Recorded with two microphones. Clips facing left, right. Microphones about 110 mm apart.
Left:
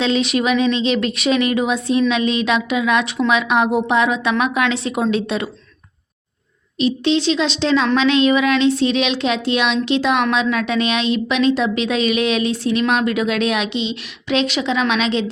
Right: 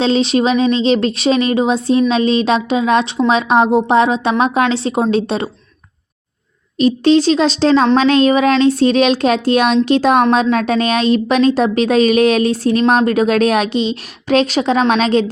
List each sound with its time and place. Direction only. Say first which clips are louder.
0.0 s a woman's voice: right 4 dB; 30° right (ahead or behind)
6.7 s a woman's voice: right 6 dB; 45° right (ahead or behind)